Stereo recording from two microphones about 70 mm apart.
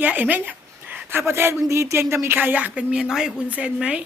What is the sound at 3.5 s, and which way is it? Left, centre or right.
Speech, centre.